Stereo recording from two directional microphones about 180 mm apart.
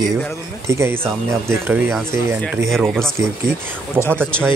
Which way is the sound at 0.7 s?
15° right (ahead or behind).